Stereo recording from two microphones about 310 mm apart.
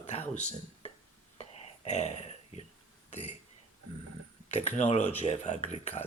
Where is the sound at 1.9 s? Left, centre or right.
Left.